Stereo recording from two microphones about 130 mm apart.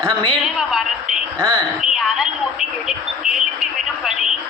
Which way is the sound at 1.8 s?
5° right (ahead or behind).